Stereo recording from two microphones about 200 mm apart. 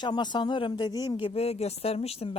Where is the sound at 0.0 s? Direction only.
20° left (ahead or behind).